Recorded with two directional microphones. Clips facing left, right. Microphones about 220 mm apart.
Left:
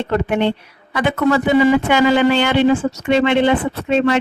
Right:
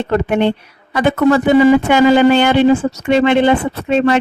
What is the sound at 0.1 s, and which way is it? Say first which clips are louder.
Speech: right 3 dB; 45° right (ahead or behind).